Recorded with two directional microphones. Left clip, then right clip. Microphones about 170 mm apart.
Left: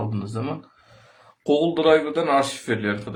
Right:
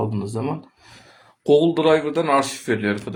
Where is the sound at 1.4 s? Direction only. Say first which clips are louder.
Right 4 dB; 20° right (ahead or behind).